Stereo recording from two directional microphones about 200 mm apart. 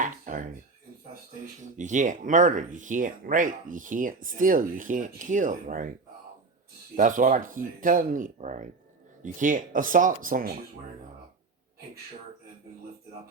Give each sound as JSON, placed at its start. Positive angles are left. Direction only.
{"t": 0.0, "sound": "a sound", "side_deg": -40}
{"t": 1.7, "sound": "speech", "side_deg": -40}
{"t": 6.9, "sound": "speech", "side_deg": -40}